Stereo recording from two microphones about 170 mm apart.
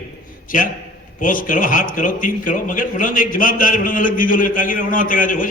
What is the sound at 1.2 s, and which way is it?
A man's voice, 55° left (ahead or behind).